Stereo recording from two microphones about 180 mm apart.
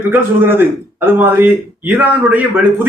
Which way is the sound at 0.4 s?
10° right (ahead or behind).